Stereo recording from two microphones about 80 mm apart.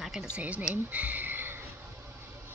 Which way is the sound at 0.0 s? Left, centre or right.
Centre.